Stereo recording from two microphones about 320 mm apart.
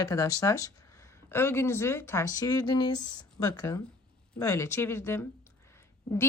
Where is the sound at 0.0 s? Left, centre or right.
Centre.